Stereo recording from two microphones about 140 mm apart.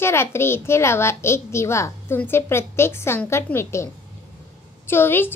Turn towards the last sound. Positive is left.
turn(degrees=15)  # may be behind; listen again after turning